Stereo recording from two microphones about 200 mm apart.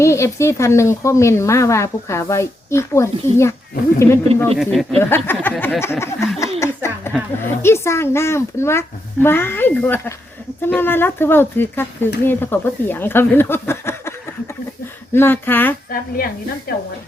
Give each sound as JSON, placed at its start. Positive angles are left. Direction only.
{"t": 0.0, "sound": "speech", "side_deg": 15}
{"t": 4.5, "sound": "speech", "side_deg": 0}
{"t": 4.9, "sound": "speech", "side_deg": 10}
{"t": 6.4, "sound": "a sound", "side_deg": 15}
{"t": 7.6, "sound": "speech", "side_deg": 10}
{"t": 15.1, "sound": "speech", "side_deg": 10}
{"t": 15.9, "sound": "speech", "side_deg": 45}